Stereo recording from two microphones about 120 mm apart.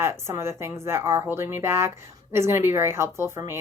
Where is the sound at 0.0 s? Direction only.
20° right (ahead or behind).